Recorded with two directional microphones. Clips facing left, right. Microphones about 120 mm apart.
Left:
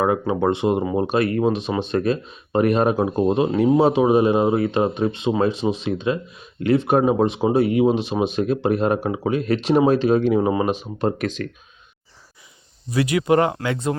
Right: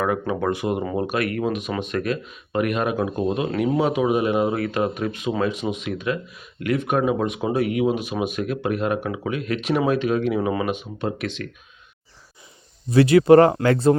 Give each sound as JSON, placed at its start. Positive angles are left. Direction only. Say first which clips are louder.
{"t": 0.0, "sound": "speech", "louder": "left 3 dB", "side_deg": 25}
{"t": 12.9, "sound": "speech", "louder": "right 6 dB", "side_deg": -30}